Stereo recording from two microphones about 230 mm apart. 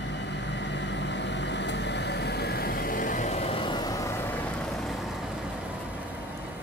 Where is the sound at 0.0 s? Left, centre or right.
Left; by 5.8 s centre.